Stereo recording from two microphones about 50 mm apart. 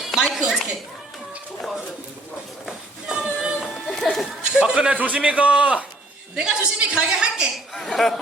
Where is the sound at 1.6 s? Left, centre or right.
Centre.